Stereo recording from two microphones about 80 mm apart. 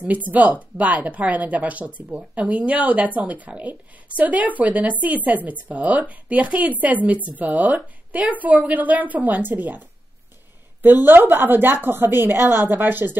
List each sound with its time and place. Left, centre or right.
0.0 s a woman's voice: centre